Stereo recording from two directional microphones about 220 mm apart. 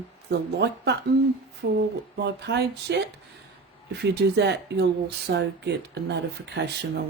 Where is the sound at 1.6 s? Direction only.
55° right (ahead or behind).